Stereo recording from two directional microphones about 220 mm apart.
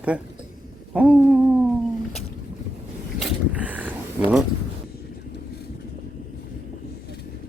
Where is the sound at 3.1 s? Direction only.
5° right (ahead or behind).